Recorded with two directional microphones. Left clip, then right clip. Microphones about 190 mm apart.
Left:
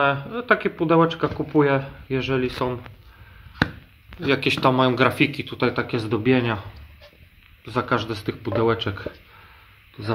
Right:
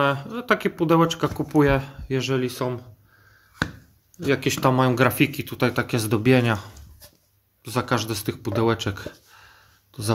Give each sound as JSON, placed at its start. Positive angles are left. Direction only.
{"t": 0.0, "sound": "speech", "side_deg": -45}
{"t": 4.3, "sound": "speech", "side_deg": -40}
{"t": 7.6, "sound": "speech", "side_deg": -50}